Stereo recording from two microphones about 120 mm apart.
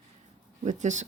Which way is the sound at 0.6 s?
85° right.